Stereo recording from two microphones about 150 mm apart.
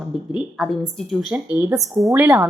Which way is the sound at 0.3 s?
Centre (ahead or behind).